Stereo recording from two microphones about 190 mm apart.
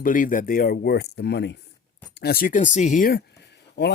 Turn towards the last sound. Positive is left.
turn(degrees=60)  # may be behind; listen again after turning